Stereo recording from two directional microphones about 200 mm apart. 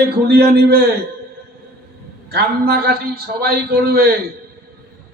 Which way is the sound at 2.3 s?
55° right (ahead or behind).